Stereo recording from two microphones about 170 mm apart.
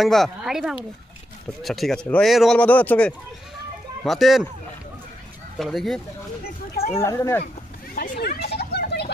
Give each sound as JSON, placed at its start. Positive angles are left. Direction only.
{"t": 0.0, "sound": "speech", "side_deg": 0}
{"t": 5.6, "sound": "speech", "side_deg": 0}
{"t": 7.0, "sound": "speech", "side_deg": 15}
{"t": 7.9, "sound": "a sound", "side_deg": 55}